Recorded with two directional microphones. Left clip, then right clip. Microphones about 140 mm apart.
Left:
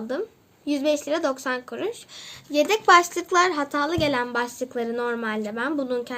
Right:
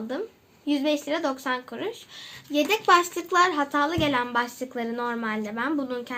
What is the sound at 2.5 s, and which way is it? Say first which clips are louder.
Speech: left 3 dB; 50° left (ahead or behind).